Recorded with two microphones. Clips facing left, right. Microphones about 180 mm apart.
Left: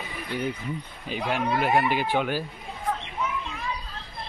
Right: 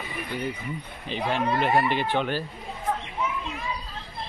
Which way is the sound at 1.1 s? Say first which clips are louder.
Right 1 dB; 10° left (ahead or behind).